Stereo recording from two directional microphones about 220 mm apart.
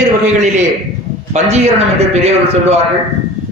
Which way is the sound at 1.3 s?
30° right (ahead or behind).